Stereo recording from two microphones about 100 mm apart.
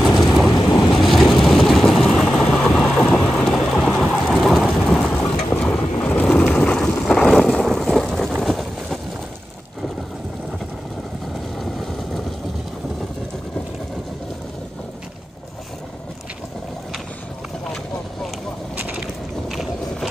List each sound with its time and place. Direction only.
0.0 s vehicle: centre (ahead or behind)
0.6 s vehicle: 35° left (ahead or behind)
1.0 s vehicle: centre (ahead or behind)
8.4 s a sound: centre (ahead or behind)
18.8 s a sound: 15° right (ahead or behind)
19.5 s walk: centre (ahead or behind)